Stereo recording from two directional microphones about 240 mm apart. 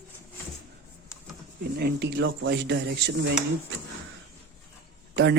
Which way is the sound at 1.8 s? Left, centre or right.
Right.